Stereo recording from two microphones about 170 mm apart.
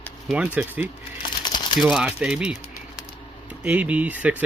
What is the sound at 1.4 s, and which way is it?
Crumpling, 25° left (ahead or behind).